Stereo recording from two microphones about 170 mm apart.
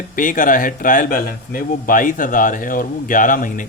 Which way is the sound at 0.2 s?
50° left (ahead or behind).